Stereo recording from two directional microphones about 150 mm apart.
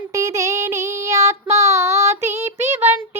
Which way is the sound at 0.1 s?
20° right (ahead or behind).